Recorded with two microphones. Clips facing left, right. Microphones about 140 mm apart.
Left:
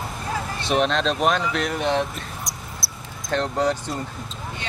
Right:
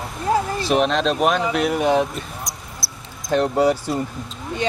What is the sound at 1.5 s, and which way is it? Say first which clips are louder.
Basketball bounce: right 5 dB; 5° right (ahead or behind).